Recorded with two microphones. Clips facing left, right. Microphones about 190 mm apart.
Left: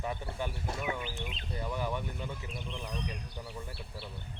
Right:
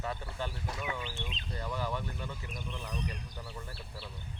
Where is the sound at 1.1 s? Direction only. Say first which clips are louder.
Left 2 dB; 10° left (ahead or behind).